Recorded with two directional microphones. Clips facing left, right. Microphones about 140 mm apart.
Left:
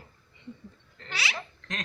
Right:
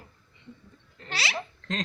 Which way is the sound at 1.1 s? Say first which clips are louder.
Right 2 dB; 30° right (ahead or behind).